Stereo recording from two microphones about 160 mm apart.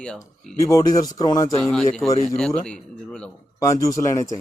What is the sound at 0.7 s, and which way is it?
Speech, 20° left (ahead or behind).